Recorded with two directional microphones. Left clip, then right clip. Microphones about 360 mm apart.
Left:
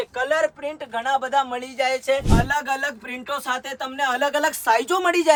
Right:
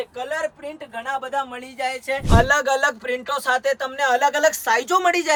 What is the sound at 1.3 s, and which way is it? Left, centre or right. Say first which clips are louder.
Speech: left 4 dB; left.